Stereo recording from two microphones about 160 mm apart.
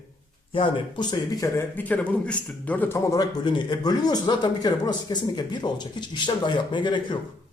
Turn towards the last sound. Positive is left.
turn(degrees=30)  # may be behind; listen again after turning